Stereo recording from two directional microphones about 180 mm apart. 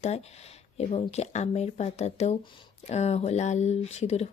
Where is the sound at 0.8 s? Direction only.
35° left (ahead or behind).